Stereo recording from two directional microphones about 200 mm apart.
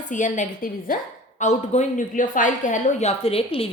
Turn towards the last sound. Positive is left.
turn(degrees=30)  # may be behind; listen again after turning